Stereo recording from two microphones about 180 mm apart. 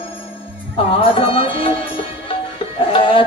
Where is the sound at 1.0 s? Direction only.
30° left (ahead or behind).